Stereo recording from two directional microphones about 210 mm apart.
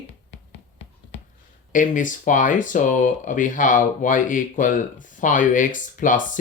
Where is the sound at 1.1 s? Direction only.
60° left (ahead or behind).